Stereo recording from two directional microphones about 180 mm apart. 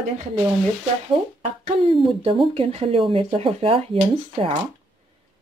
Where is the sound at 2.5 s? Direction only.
35° right (ahead or behind).